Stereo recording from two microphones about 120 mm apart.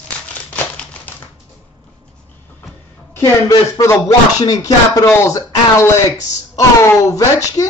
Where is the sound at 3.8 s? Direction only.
25° left (ahead or behind).